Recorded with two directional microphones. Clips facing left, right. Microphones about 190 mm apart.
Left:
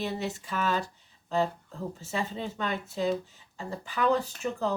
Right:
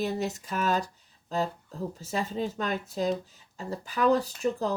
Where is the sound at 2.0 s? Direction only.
40° right (ahead or behind).